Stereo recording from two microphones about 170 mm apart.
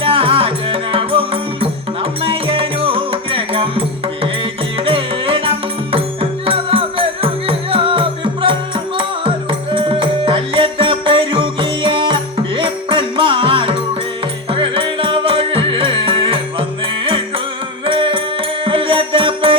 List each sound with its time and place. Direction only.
0.0 s music: 30° right (ahead or behind)